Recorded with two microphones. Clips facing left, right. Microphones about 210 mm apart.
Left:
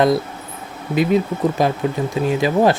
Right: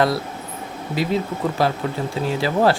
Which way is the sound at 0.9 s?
20° left (ahead or behind).